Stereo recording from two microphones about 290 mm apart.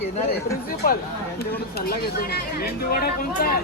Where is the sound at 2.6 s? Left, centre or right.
Left.